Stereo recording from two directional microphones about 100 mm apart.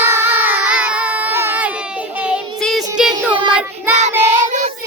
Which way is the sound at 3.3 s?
60° right (ahead or behind).